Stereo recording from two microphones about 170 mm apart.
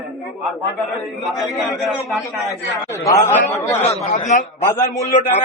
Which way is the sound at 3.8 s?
40° left (ahead or behind).